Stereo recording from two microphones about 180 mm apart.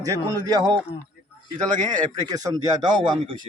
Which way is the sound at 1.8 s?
45° right (ahead or behind).